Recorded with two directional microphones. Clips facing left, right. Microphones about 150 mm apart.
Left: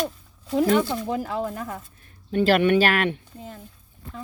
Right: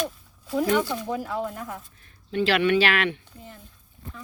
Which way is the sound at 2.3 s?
45° left (ahead or behind).